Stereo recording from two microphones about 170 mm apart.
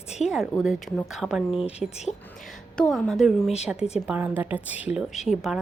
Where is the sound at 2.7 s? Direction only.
5° left (ahead or behind).